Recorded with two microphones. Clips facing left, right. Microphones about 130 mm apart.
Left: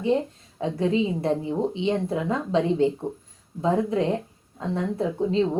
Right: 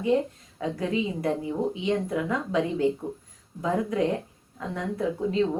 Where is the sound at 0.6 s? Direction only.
25° left (ahead or behind).